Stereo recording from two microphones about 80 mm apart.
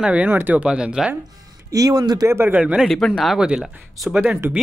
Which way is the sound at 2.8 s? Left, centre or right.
Centre.